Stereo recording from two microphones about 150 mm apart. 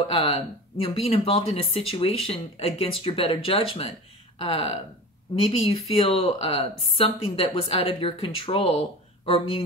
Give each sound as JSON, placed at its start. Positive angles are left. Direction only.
{"t": 0.1, "sound": "speech", "side_deg": 40}